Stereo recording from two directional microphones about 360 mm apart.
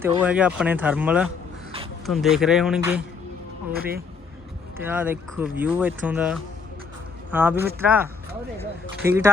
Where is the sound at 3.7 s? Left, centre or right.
Right.